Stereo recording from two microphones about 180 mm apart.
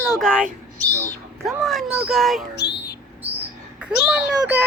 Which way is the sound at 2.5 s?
70° left (ahead or behind).